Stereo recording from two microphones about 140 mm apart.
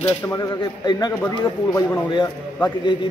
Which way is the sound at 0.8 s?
30° left (ahead or behind).